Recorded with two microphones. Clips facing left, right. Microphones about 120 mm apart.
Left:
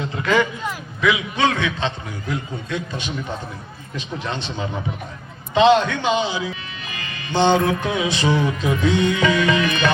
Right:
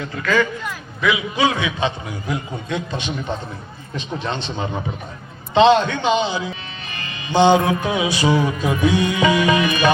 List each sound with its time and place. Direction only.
0.0 s speech: 25° left (ahead or behind)
1.0 s music: 5° right (ahead or behind); by 3.1 s 20° right (ahead or behind)
5.5 s a man's voice: 30° right (ahead or behind)
7.1 s music: 15° right (ahead or behind)